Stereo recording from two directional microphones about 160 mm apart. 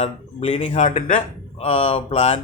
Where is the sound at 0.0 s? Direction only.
35° left (ahead or behind); by 1.2 s 55° left (ahead or behind).